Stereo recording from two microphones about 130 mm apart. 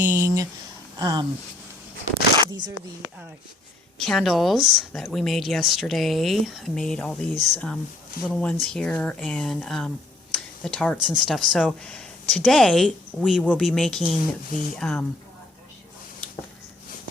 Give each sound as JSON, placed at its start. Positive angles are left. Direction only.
{"t": 0.0, "sound": "speech", "side_deg": -20}
{"t": 2.4, "sound": "speech", "side_deg": -25}
{"t": 3.9, "sound": "speech", "side_deg": 5}
{"t": 10.9, "sound": "speech", "side_deg": -5}
{"t": 13.4, "sound": "speech", "side_deg": 10}